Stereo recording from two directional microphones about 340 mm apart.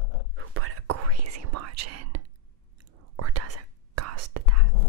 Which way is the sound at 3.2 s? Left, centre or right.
Right.